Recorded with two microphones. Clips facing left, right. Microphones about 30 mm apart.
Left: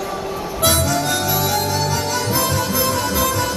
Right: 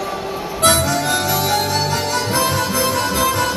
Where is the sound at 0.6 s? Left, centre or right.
Centre.